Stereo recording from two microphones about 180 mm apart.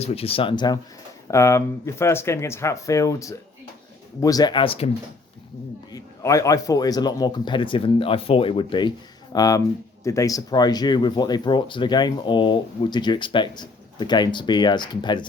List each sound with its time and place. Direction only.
0.0 s speech: 35° left (ahead or behind)
5.9 s speech: 20° left (ahead or behind)